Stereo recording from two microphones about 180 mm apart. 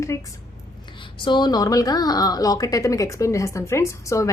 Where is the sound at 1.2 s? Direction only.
25° left (ahead or behind).